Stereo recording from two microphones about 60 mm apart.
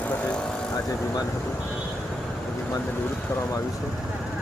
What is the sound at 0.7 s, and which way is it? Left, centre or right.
Speech, left.